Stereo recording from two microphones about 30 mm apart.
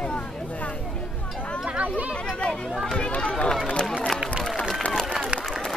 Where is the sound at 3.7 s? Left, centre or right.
Centre.